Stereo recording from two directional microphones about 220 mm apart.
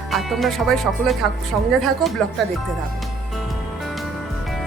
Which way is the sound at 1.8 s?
Centre (ahead or behind).